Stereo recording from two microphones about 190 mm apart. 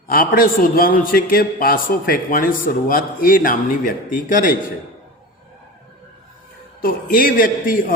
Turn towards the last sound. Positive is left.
turn(degrees=45)  # may be behind; listen again after turning